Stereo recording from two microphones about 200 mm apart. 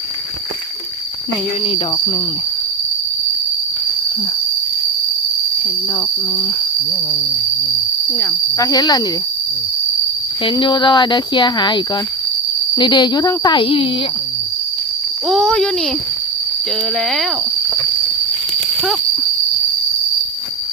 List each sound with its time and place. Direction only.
1.6 s speech: 30° left (ahead or behind)
8.2 s speech: 15° left (ahead or behind)
10.4 s speech: 25° left (ahead or behind)
15.3 s speech: centre (ahead or behind)